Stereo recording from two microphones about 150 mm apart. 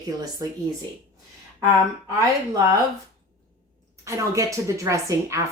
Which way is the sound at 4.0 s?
20° right (ahead or behind).